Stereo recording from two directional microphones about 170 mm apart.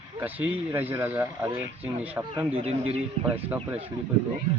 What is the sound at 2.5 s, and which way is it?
Speech, 35° right (ahead or behind).